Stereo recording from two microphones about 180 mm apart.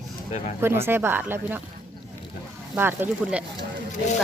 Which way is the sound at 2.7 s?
10° right (ahead or behind).